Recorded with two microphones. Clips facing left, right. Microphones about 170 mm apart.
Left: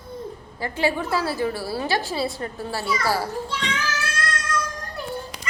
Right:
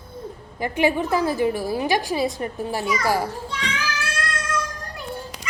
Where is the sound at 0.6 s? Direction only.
15° right (ahead or behind).